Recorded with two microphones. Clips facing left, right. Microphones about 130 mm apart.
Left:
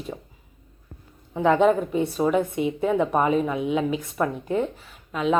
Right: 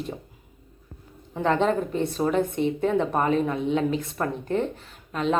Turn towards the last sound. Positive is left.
turn(degrees=5)  # may be behind; listen again after turning